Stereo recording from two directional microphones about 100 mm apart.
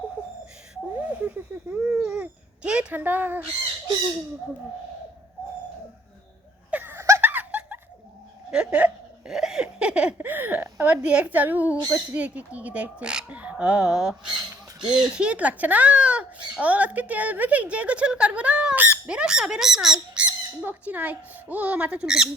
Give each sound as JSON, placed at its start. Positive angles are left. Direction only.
{"t": 0.9, "sound": "a sound", "side_deg": -15}
{"t": 6.7, "sound": "laughter", "side_deg": -20}
{"t": 10.2, "sound": "speech", "side_deg": -20}